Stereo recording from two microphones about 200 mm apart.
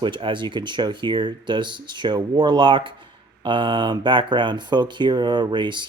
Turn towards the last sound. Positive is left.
turn(degrees=-25)  # may be behind; listen again after turning